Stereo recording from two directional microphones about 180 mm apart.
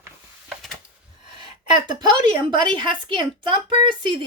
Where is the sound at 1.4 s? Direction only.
25° right (ahead or behind).